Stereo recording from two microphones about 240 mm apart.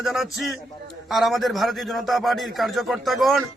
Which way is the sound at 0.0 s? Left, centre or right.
Centre.